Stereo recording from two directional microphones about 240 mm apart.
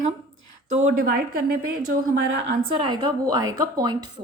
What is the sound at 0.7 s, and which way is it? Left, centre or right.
Speech, right.